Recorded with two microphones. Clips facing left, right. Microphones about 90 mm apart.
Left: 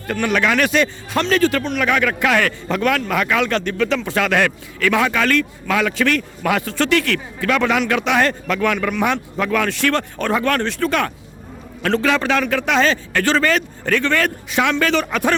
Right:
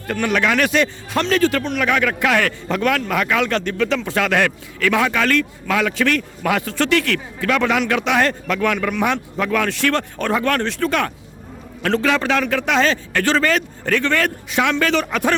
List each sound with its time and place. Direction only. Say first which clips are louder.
0.1 s a man's voice: even; 25° left (ahead or behind)